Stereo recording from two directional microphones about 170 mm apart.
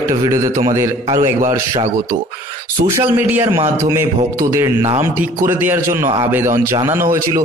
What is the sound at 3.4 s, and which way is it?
A man's voice, 25° right (ahead or behind).